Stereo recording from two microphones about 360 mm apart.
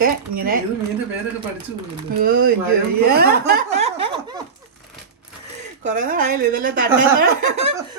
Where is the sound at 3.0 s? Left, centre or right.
Right.